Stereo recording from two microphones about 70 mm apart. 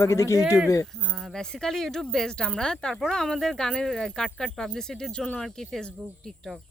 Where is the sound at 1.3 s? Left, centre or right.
Centre.